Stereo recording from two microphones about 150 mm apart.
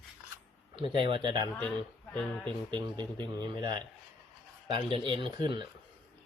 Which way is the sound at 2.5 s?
30° right (ahead or behind).